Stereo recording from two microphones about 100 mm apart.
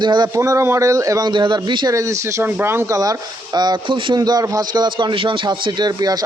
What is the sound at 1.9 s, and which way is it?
Speech, 30° right (ahead or behind).